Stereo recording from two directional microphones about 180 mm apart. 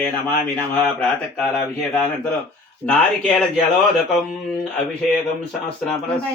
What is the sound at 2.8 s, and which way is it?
Speech, 5° left (ahead or behind).